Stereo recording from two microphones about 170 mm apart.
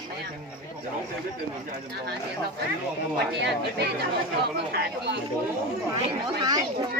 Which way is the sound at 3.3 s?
85° right.